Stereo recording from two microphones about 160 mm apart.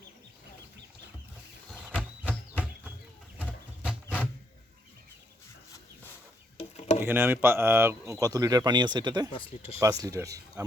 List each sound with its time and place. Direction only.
1.9 s a sound: 10° right (ahead or behind)
6.6 s bird: 40° left (ahead or behind)
7.0 s speech: 15° right (ahead or behind)
9.3 s speech: 35° left (ahead or behind)
10.0 s speech: 20° right (ahead or behind)